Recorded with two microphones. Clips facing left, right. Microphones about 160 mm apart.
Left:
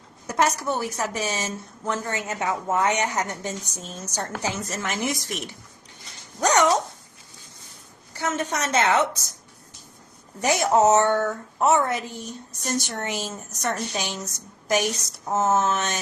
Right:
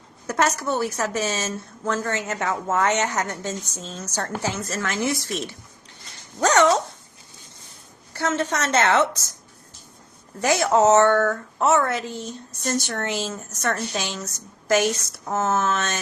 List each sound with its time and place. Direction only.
0.3 s speech: 15° left (ahead or behind)
8.1 s a sound: 15° left (ahead or behind)
8.5 s speech: 15° left (ahead or behind)
10.4 s speech: 15° left (ahead or behind)